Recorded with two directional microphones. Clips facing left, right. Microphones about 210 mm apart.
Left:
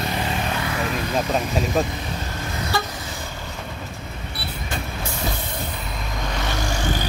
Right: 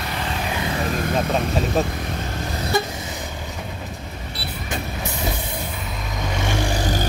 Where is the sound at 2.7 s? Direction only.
20° right (ahead or behind).